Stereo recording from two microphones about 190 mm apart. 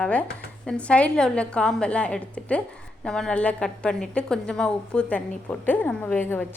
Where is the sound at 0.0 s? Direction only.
5° left (ahead or behind).